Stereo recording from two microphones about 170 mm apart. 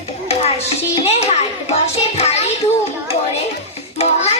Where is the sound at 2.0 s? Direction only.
40° left (ahead or behind).